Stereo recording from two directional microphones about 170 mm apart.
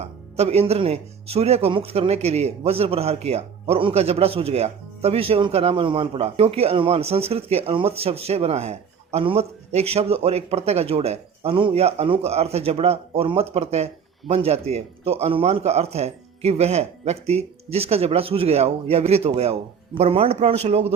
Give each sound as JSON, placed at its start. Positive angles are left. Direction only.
{"t": 0.0, "sound": "speech", "side_deg": -40}